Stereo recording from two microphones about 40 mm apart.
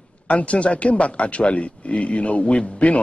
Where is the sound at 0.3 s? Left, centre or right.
Left.